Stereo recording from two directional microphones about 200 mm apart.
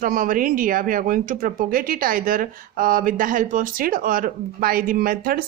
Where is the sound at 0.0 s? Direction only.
45° right (ahead or behind).